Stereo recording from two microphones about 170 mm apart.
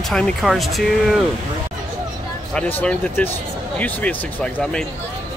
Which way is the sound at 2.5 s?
10° left (ahead or behind).